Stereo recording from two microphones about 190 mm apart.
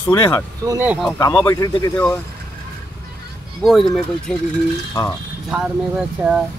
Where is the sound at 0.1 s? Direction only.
20° left (ahead or behind).